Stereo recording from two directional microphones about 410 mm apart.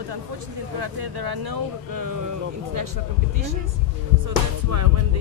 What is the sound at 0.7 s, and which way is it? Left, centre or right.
Speech, right.